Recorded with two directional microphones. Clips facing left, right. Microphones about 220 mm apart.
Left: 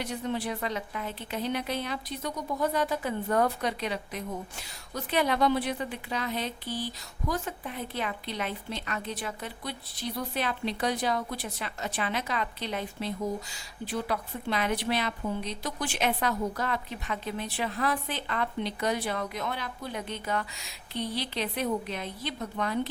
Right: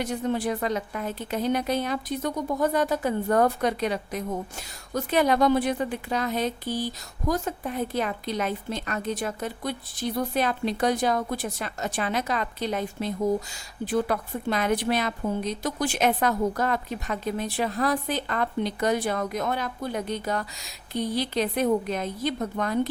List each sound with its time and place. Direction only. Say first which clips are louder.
0.0 s speech: right 5 dB; 45° right (ahead or behind)